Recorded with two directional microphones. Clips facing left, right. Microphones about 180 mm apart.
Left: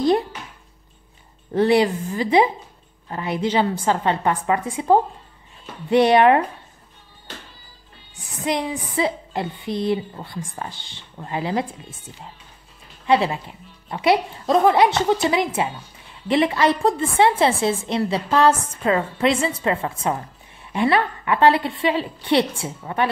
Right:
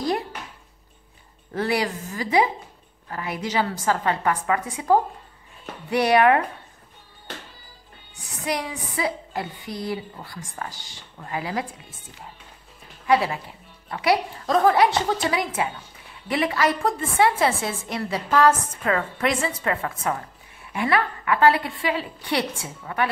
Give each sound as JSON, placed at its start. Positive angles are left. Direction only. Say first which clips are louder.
{"t": 1.5, "sound": "a woman's voice", "louder": "left 8 dB", "side_deg": 25}
{"t": 8.5, "sound": "a woman's voice", "louder": "left 4 dB", "side_deg": 25}
{"t": 13.0, "sound": "a woman's voice", "louder": "left 2 dB", "side_deg": 25}